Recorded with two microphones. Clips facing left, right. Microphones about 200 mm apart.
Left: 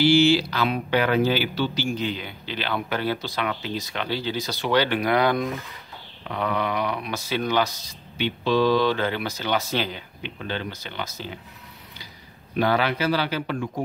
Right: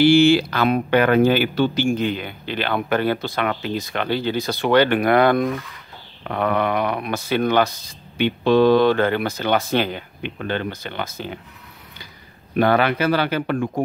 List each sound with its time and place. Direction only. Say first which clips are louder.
0.0 s speech: right 4 dB; 55° right (ahead or behind)
12.5 s speech: right 5 dB; 55° right (ahead or behind)